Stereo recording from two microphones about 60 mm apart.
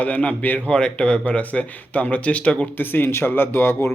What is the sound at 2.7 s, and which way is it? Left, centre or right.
A man's voice, left.